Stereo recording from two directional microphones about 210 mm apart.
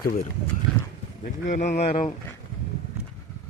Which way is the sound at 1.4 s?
35° left (ahead or behind).